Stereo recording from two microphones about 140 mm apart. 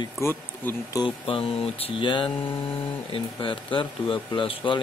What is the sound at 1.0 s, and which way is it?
Speech, 40° left (ahead or behind).